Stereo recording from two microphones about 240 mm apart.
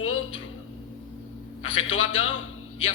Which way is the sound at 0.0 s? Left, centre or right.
Left.